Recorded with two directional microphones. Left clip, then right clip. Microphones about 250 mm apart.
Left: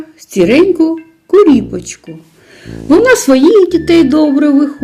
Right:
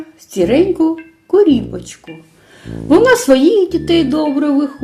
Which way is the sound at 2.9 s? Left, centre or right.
Left.